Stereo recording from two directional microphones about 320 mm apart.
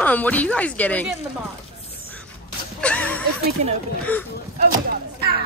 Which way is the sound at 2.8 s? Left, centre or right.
Centre.